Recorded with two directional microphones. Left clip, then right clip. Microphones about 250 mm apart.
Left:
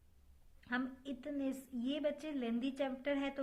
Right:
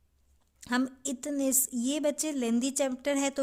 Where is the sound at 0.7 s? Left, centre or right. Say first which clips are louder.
Right 10 dB; right.